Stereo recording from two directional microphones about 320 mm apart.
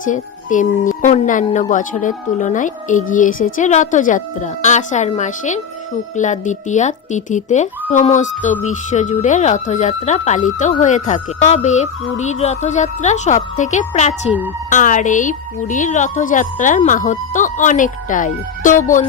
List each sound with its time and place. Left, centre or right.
0.0 s speech: left